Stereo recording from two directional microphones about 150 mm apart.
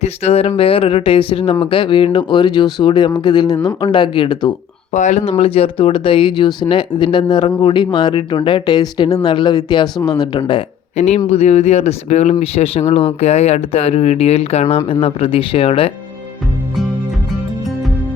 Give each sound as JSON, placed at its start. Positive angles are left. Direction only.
{"t": 0.0, "sound": "speech", "side_deg": 45}
{"t": 4.9, "sound": "speech", "side_deg": 55}
{"t": 5.4, "sound": "speech", "side_deg": 35}
{"t": 10.9, "sound": "speech", "side_deg": 50}